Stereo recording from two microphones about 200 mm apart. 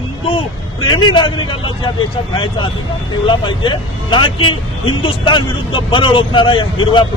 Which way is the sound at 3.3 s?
25° left (ahead or behind).